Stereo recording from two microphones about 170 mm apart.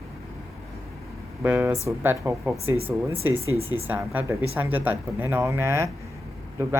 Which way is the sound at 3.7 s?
10° right (ahead or behind).